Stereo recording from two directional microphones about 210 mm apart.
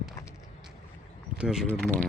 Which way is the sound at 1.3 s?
5° right (ahead or behind).